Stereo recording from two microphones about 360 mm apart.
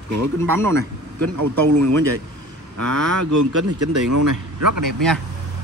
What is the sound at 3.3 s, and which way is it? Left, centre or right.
Speech, right.